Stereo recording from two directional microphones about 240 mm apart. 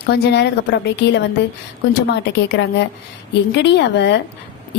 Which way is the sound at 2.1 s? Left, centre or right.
Left.